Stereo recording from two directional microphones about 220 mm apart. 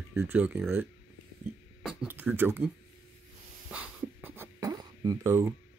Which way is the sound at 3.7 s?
5° right (ahead or behind).